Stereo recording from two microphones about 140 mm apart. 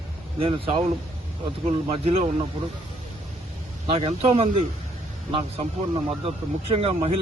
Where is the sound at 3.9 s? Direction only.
45° right (ahead or behind).